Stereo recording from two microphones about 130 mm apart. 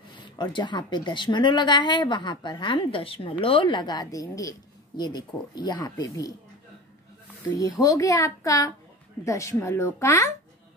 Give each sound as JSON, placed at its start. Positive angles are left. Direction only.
{"t": 0.2, "sound": "a woman's voice", "side_deg": 35}
{"t": 7.5, "sound": "a child's voice", "side_deg": 25}